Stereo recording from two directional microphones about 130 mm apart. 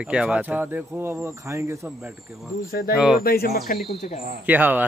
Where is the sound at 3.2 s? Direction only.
90° left.